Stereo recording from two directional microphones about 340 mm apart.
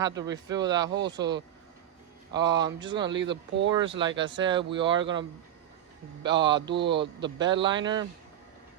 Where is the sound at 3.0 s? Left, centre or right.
Right.